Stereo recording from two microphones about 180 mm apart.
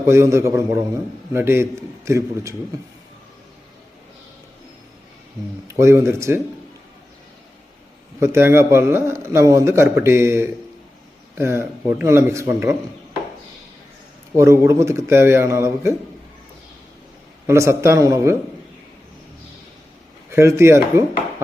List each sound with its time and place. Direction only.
0.0 s a man's voice: 15° right (ahead or behind)
5.6 s a man's voice: 15° right (ahead or behind)
8.2 s a man's voice: 15° right (ahead or behind)
14.3 s a man's voice: 15° right (ahead or behind)
17.4 s a man's voice: 15° right (ahead or behind)
20.3 s a man's voice: 15° right (ahead or behind)